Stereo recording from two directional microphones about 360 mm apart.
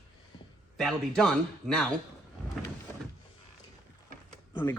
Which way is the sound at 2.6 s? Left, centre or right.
Centre.